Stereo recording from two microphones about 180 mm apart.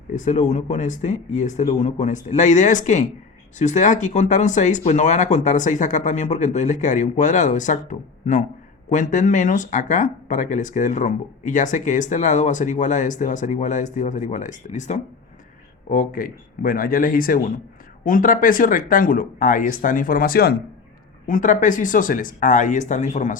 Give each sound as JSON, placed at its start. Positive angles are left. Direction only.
{"t": 0.1, "sound": "speech", "side_deg": 40}
{"t": 15.9, "sound": "speech", "side_deg": 50}
{"t": 21.2, "sound": "speech", "side_deg": 45}